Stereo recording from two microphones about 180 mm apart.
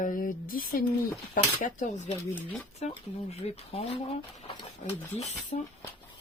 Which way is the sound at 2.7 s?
35° left (ahead or behind).